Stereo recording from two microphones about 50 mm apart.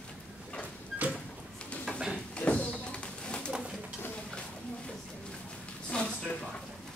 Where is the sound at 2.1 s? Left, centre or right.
Left.